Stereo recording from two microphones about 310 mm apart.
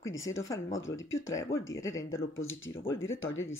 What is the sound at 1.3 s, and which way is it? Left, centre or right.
Speech, centre.